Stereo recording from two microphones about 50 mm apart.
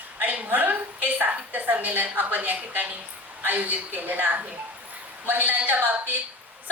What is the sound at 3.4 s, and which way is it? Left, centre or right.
A woman's voice, right.